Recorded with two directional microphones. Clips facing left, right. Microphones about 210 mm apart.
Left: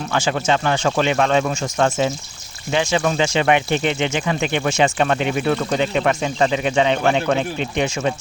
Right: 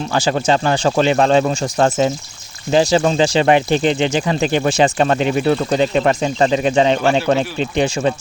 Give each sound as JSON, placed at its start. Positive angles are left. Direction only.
{"t": 0.1, "sound": "speech", "side_deg": -35}